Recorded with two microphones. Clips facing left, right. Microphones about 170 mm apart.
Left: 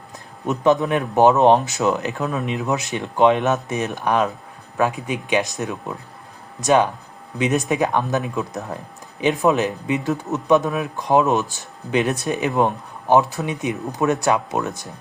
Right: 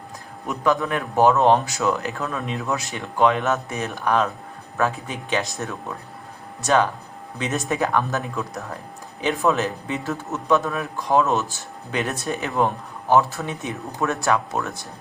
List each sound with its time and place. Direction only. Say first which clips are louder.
0.4 s speech: left 4 dB; 20° left (ahead or behind)